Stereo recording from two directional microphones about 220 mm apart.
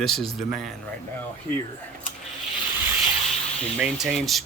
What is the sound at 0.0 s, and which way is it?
Speech, centre (ahead or behind).